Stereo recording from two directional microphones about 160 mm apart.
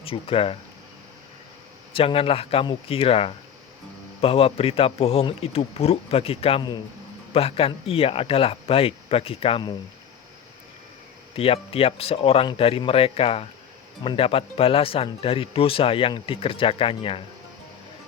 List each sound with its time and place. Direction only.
0.0 s speech: 35° left (ahead or behind)
1.9 s speech: 35° left (ahead or behind)
11.3 s speech: 35° left (ahead or behind)